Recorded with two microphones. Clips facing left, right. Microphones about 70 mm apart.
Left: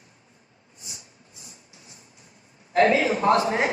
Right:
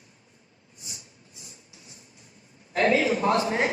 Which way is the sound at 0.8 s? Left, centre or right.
Left.